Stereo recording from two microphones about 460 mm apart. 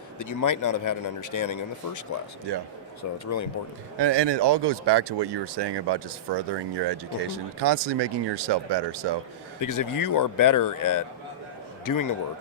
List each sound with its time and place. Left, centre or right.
0.2 s a man's voice: left
2.5 s speech: right
3.2 s a man's voice: left
3.9 s speech: right
9.6 s a man's voice: left